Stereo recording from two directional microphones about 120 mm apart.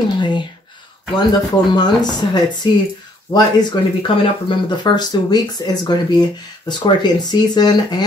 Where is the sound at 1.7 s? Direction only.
35° left (ahead or behind).